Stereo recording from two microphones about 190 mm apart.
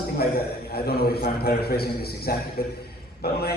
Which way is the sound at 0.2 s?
55° left (ahead or behind).